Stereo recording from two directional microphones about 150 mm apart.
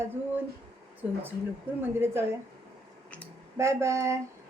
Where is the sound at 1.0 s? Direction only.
10° right (ahead or behind).